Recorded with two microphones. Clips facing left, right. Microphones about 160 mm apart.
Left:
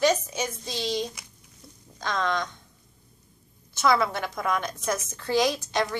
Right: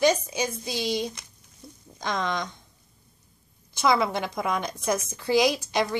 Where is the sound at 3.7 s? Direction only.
15° right (ahead or behind).